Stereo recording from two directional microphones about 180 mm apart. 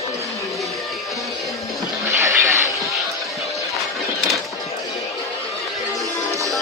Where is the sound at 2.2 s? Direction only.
15° right (ahead or behind).